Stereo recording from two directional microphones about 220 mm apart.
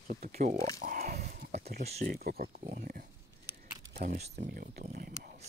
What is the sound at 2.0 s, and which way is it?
Speech, 45° right (ahead or behind).